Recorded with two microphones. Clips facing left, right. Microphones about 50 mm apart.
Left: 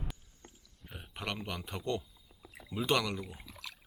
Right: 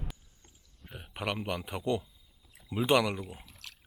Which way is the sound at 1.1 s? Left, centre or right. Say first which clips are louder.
Right 5 dB; centre.